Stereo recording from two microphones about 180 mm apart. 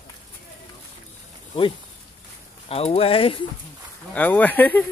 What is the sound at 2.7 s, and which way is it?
Speech, 35° left (ahead or behind).